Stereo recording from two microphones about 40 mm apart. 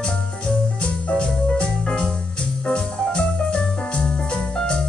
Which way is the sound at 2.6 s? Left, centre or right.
Left.